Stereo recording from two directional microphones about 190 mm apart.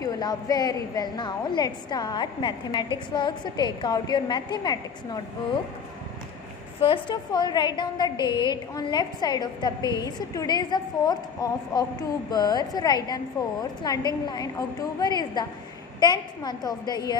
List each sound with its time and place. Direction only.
0.0 s a woman's voice: 20° left (ahead or behind)
6.8 s a woman's voice: 25° left (ahead or behind)